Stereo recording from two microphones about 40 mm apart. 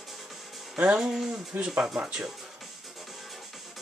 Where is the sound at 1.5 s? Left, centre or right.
Right.